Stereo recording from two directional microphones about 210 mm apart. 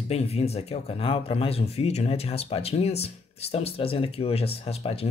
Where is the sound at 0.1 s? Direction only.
30° left (ahead or behind).